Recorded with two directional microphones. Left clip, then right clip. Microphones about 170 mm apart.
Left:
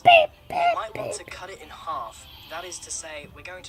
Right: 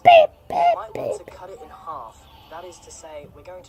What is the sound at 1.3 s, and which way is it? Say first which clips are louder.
Speech: even; 15° left (ahead or behind).